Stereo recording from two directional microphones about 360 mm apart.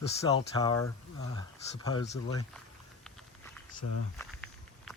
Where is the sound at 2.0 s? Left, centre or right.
Left.